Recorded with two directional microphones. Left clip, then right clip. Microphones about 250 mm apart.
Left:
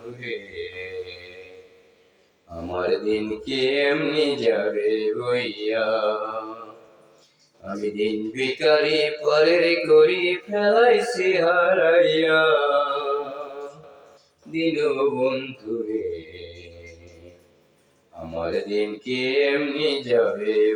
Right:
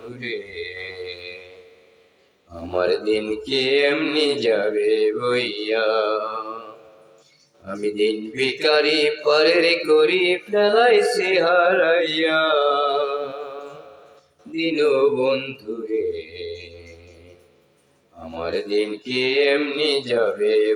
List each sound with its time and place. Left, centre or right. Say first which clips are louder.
0.2 s a man's voice: right 3 dB; right
2.7 s mantra: right 3 dB; right
7.7 s mantra: right 4 dB; right
14.6 s mantra: right 4 dB; right
18.4 s mantra: right 2 dB; right